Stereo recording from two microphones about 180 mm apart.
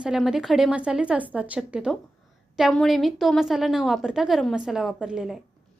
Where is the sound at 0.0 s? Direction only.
5° right (ahead or behind).